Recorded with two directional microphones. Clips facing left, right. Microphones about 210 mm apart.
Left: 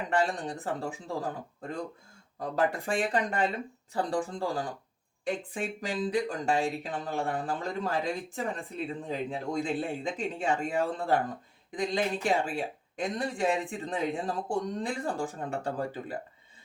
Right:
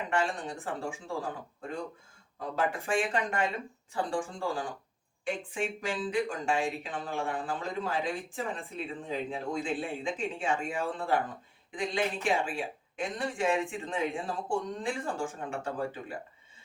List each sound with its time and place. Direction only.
0.1 s speech: 35° left (ahead or behind)
2.4 s speech: 40° left (ahead or behind)
9.0 s speech: 40° left (ahead or behind)